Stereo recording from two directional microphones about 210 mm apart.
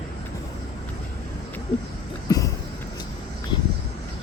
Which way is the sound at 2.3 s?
15° left (ahead or behind).